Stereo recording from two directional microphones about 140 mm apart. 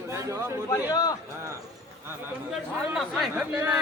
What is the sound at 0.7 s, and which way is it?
Speech, 25° left (ahead or behind).